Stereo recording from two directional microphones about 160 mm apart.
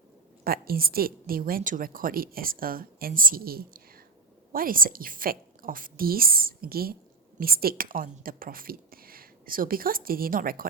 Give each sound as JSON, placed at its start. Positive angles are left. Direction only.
{"t": 0.4, "sound": "a woman's voice", "side_deg": -70}